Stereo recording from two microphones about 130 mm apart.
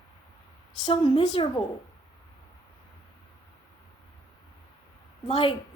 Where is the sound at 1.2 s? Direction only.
55° left (ahead or behind).